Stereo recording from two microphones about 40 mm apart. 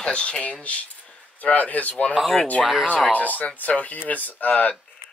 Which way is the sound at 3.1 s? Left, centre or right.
Left.